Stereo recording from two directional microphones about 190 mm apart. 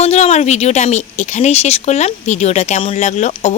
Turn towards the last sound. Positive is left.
turn(degrees=40)  # may be behind; listen again after turning